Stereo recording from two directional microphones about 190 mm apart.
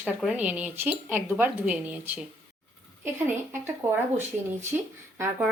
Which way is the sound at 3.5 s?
10° right (ahead or behind).